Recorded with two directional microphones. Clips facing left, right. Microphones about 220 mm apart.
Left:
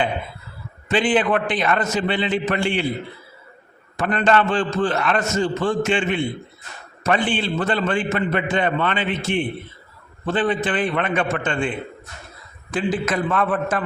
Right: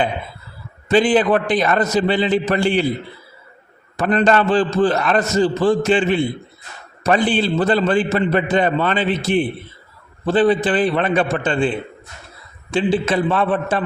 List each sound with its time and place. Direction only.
0.9 s a man's voice: 40° right (ahead or behind)
3.9 s a man's voice: 40° right (ahead or behind)